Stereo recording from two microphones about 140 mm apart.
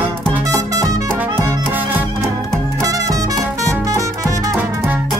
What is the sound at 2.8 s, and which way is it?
Music, 25° right (ahead or behind).